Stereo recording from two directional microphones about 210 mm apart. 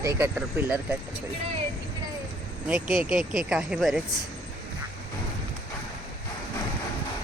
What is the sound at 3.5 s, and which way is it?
Speech, 5° right (ahead or behind).